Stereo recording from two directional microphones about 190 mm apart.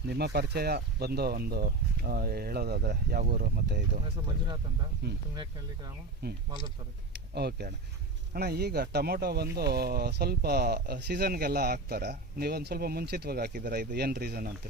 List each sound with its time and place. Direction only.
0.1 s speech: 55° right (ahead or behind)
4.3 s speech: 25° right (ahead or behind)
6.2 s speech: 55° right (ahead or behind)